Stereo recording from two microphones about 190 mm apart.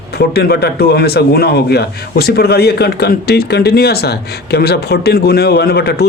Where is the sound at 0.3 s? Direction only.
60° left (ahead or behind).